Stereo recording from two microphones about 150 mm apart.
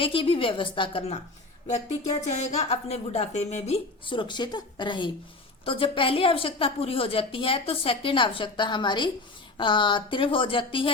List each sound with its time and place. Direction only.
0.0 s a woman's voice: 35° left (ahead or behind)
2.4 s speech: 45° left (ahead or behind)
4.0 s a woman's voice: 35° left (ahead or behind)